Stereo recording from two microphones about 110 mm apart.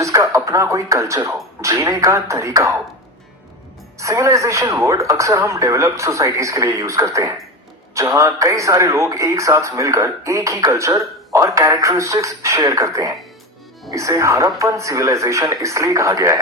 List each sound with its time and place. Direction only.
0.0 s speech: 30° right (ahead or behind)
3.9 s speech: 30° right (ahead or behind)